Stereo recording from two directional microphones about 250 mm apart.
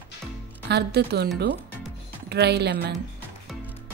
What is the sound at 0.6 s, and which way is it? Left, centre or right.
A woman's voice, right.